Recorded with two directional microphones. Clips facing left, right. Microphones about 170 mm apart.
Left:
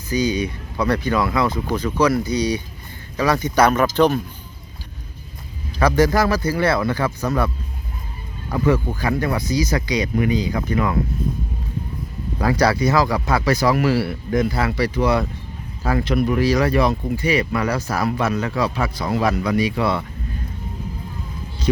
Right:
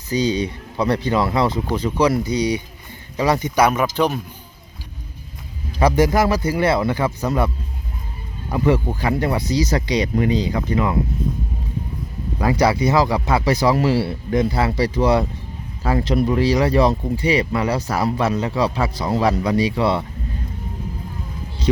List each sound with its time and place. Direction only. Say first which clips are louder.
0.1 s speech: right 1 dB; 30° right (ahead or behind); by 4.2 s 5° right (ahead or behind)
5.8 s speech: right 1 dB; 20° right (ahead or behind)
8.7 s speech: right 1 dB; 25° right (ahead or behind)
12.5 s speech: right 1 dB; 25° right (ahead or behind)